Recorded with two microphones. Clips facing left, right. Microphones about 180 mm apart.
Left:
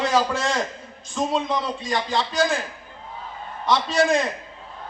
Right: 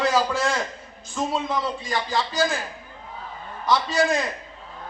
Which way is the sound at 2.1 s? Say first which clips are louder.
Left 1 dB; centre (ahead or behind).